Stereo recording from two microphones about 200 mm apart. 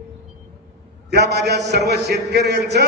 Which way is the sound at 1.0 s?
55° right (ahead or behind).